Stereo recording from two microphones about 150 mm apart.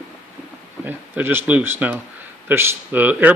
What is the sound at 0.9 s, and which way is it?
Speech, 10° right (ahead or behind).